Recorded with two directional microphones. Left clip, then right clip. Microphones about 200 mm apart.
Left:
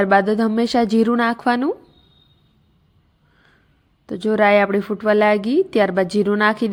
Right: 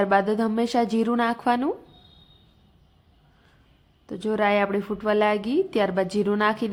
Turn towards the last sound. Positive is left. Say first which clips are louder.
# left 5 dB
turn(degrees=25)  # may be behind; listen again after turning